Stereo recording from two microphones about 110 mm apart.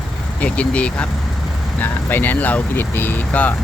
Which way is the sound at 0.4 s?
10° left (ahead or behind).